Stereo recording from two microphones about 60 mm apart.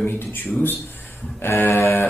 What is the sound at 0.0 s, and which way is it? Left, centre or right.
Speech, left.